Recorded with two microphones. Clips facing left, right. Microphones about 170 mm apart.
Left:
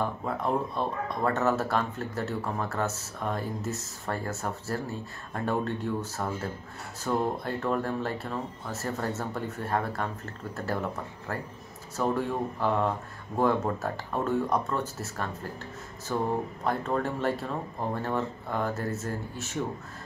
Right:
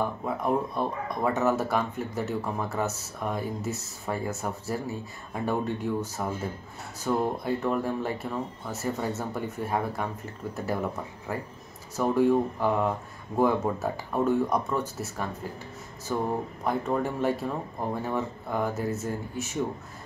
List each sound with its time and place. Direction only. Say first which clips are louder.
0.2 s speech: right 2 dB; 10° right (ahead or behind)
12.0 s speech: right 5 dB; 10° right (ahead or behind)